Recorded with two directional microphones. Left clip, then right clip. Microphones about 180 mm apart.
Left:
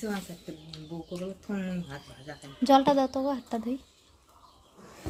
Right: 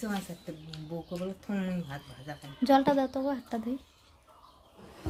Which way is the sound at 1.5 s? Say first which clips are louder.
Even; 55° right (ahead or behind).